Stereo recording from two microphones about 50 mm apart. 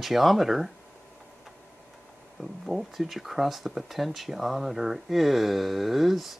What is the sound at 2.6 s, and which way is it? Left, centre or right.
Speech, centre.